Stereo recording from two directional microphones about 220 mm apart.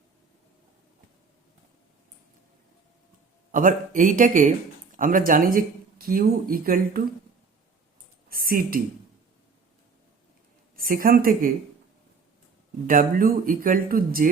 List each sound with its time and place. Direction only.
3.5 s speech: 40° right (ahead or behind)
8.3 s speech: 40° right (ahead or behind)
10.8 s speech: 40° right (ahead or behind)
12.9 s speech: 40° right (ahead or behind)